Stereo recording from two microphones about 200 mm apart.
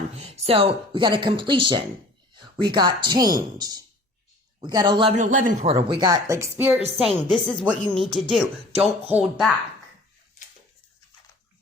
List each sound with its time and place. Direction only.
0.1 s speech: 35° right (ahead or behind)
5.1 s a man's voice: 40° right (ahead or behind)
5.9 s speech: 20° right (ahead or behind)
6.9 s speech: centre (ahead or behind)